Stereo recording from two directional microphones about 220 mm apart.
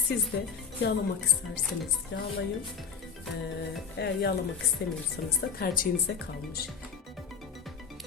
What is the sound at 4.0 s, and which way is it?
Speech, 50° left (ahead or behind).